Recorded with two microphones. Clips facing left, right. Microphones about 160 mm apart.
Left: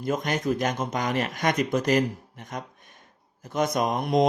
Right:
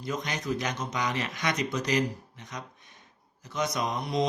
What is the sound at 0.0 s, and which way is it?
Speech, 50° left (ahead or behind).